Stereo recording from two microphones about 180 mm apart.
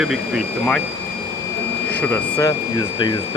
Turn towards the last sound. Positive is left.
turn(degrees=25)  # may be behind; listen again after turning